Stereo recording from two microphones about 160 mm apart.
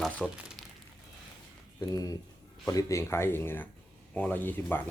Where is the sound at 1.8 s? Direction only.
20° left (ahead or behind).